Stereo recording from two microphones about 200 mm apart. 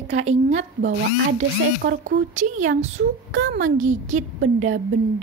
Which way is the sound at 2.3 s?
40° right (ahead or behind).